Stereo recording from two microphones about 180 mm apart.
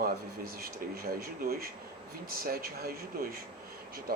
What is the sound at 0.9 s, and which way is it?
Speech, 55° right (ahead or behind).